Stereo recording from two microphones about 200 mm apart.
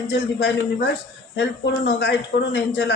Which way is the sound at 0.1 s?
55° left (ahead or behind).